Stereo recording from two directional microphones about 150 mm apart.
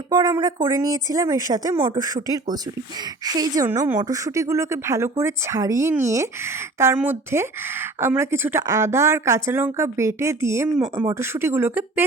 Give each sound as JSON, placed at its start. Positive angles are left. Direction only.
{"t": 0.1, "sound": "speech", "side_deg": -25}